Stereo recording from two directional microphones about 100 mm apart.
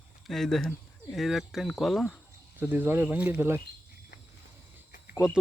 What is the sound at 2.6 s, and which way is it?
Speech, 20° right (ahead or behind).